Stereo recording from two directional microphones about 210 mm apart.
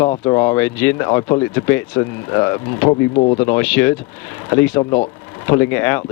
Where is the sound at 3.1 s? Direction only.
35° left (ahead or behind).